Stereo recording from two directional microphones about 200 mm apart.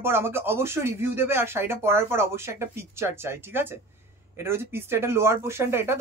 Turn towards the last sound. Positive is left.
turn(degrees=-15)  # may be behind; listen again after turning